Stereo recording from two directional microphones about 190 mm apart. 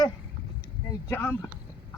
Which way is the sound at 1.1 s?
10° left (ahead or behind).